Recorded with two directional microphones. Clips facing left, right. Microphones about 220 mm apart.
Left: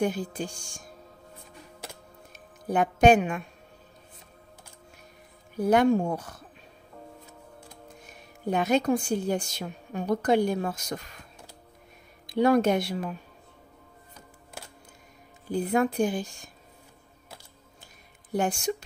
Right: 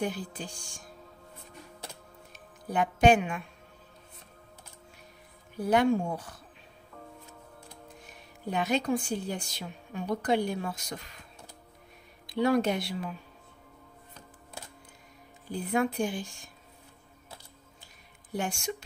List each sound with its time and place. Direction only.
0.0 s a woman's voice: 45° left (ahead or behind)
2.7 s a woman's voice: 45° left (ahead or behind)
5.6 s a woman's voice: 45° left (ahead or behind)
8.5 s a woman's voice: 45° left (ahead or behind)
12.3 s a woman's voice: 45° left (ahead or behind)
15.5 s speech: 40° left (ahead or behind)
18.3 s speech: 40° left (ahead or behind)